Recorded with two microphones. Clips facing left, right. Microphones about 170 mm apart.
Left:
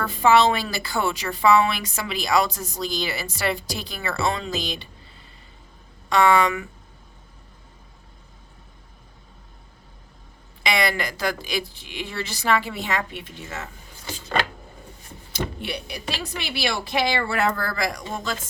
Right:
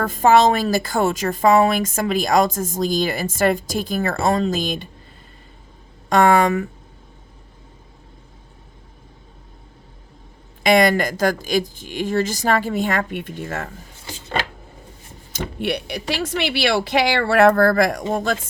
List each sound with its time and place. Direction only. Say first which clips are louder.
0.0 s a woman's voice: right 3 dB; 45° right (ahead or behind)
6.1 s a woman's voice: right 4 dB; 45° right (ahead or behind)
10.6 s a woman's voice: right 9 dB; 50° right (ahead or behind)
13.9 s a sound: left 1 dB; 25° right (ahead or behind)
15.6 s speech: right 7 dB; 70° right (ahead or behind); by 18.3 s 55° right (ahead or behind)